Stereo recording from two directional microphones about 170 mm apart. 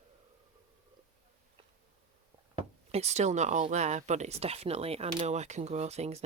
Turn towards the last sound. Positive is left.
turn(degrees=-40)  # may be behind; listen again after turning